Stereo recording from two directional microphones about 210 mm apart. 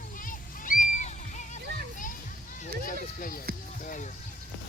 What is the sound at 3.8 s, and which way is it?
Music, 40° left (ahead or behind).